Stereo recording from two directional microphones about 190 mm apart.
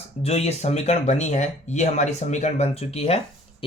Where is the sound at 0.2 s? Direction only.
35° left (ahead or behind).